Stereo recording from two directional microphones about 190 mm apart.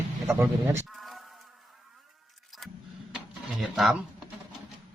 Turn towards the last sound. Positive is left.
turn(degrees=-5)  # may be behind; listen again after turning